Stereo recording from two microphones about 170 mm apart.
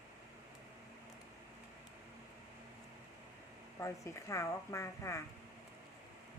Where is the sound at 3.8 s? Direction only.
15° left (ahead or behind).